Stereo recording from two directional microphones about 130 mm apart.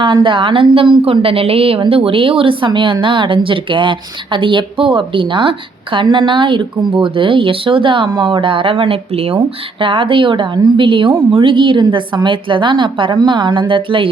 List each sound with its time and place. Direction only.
0.0 s a woman's voice: 40° right (ahead or behind)